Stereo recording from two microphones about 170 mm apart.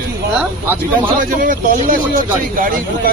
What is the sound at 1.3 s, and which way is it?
Speech, 55° right (ahead or behind).